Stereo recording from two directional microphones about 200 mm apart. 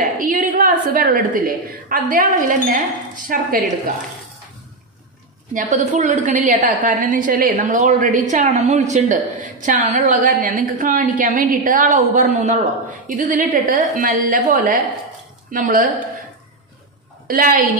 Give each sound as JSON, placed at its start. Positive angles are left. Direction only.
{"t": 0.0, "sound": "a woman's voice", "side_deg": -40}
{"t": 5.5, "sound": "a woman's voice", "side_deg": -40}
{"t": 17.3, "sound": "a woman's voice", "side_deg": -45}